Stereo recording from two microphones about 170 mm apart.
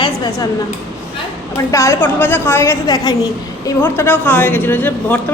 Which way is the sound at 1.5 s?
20° left (ahead or behind).